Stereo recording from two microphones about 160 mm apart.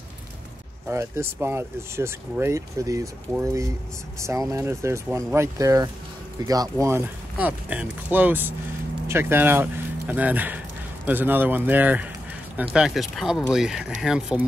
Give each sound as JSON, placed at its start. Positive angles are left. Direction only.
{"t": 0.8, "sound": "speech", "side_deg": -15}